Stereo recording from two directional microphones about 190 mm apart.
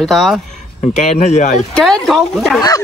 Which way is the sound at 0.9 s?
35° left (ahead or behind).